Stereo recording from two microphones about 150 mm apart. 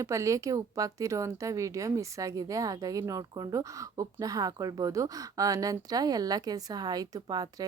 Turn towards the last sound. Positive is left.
turn(degrees=-25)  # may be behind; listen again after turning